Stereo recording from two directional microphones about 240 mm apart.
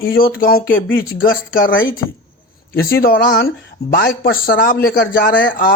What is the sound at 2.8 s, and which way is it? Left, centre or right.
Speech, left.